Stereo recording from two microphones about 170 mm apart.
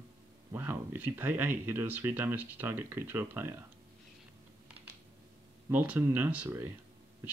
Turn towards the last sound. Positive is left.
turn(degrees=-10)  # may be behind; listen again after turning